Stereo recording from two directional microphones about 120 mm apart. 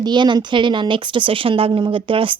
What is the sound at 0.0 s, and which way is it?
A woman's voice, 40° right (ahead or behind).